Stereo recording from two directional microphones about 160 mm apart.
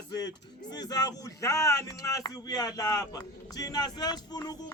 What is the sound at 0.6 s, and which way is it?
Speech, 25° left (ahead or behind).